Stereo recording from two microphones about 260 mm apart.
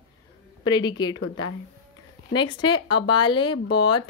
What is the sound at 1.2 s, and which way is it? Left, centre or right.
Speech, left.